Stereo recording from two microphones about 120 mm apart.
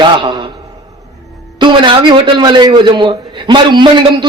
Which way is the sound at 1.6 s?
40° right (ahead or behind).